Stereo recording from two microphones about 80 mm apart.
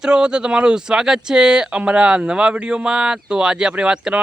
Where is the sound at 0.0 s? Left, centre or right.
Centre.